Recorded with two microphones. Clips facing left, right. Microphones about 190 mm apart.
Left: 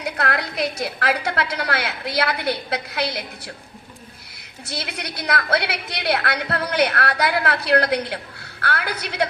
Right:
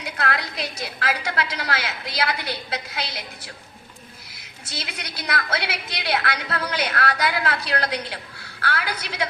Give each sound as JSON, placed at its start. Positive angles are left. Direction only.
{"t": 0.0, "sound": "a woman's voice", "side_deg": 60}
{"t": 4.6, "sound": "a woman's voice", "side_deg": 60}